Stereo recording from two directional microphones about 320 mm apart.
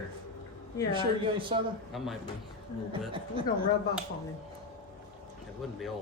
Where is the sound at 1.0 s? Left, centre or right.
Centre.